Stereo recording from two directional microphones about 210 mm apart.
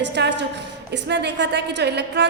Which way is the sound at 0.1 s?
55° right (ahead or behind).